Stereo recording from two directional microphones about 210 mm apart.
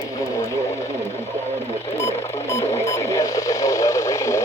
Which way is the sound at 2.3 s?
10° left (ahead or behind).